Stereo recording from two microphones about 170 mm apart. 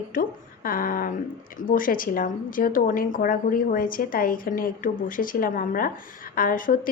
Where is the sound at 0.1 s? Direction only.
55° left (ahead or behind).